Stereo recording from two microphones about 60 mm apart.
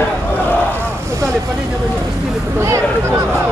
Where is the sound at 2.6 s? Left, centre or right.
Right.